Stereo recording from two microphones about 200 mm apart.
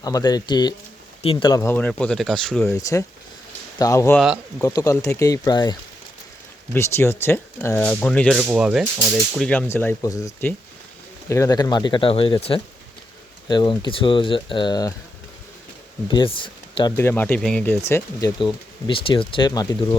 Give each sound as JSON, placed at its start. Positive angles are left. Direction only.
{"t": 0.0, "sound": "speech", "side_deg": 20}
{"t": 2.7, "sound": "speech", "side_deg": 15}
{"t": 6.7, "sound": "speech", "side_deg": 15}
{"t": 8.4, "sound": "speech", "side_deg": -5}
{"t": 13.5, "sound": "speech", "side_deg": 25}
{"t": 16.0, "sound": "speech", "side_deg": 25}
{"t": 17.0, "sound": "speech", "side_deg": 10}
{"t": 18.3, "sound": "speech", "side_deg": 25}